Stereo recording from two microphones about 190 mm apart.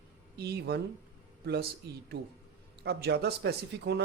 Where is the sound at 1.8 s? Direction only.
60° right (ahead or behind).